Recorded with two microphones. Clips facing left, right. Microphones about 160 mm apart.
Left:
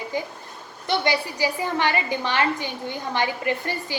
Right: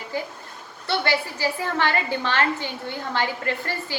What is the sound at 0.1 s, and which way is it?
A woman's voice, 15° left (ahead or behind).